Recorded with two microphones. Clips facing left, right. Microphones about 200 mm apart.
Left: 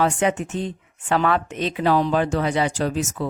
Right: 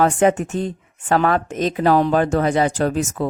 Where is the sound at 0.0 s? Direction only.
45° right (ahead or behind).